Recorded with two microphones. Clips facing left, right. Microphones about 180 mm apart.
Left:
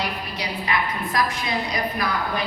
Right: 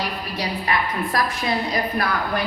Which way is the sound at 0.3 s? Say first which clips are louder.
Right 3 dB; 40° right (ahead or behind).